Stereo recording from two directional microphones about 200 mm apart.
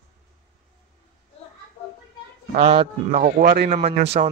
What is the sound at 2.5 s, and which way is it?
Speech, 30° right (ahead or behind).